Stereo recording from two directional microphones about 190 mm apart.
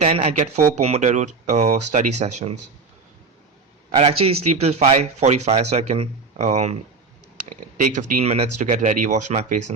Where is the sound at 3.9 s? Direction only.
35° right (ahead or behind).